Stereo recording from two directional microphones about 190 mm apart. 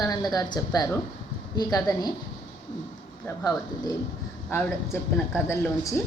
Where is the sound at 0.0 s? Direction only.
20° left (ahead or behind).